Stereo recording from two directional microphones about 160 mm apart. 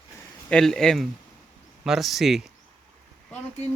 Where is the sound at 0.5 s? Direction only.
5° left (ahead or behind).